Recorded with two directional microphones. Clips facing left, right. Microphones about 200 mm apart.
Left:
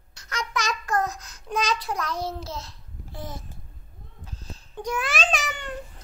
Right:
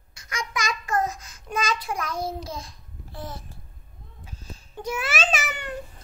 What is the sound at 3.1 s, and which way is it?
Speech, 15° left (ahead or behind).